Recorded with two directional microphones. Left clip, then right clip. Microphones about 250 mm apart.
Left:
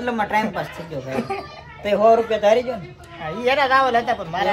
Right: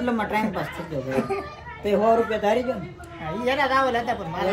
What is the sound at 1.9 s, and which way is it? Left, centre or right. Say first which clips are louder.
Speech: left 5 dB; centre.